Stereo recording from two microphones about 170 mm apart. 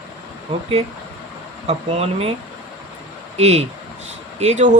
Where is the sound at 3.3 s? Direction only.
40° right (ahead or behind).